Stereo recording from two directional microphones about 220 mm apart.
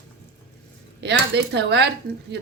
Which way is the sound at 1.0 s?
50° right (ahead or behind).